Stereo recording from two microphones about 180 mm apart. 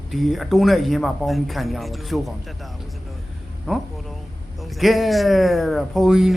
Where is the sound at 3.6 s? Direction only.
Centre (ahead or behind).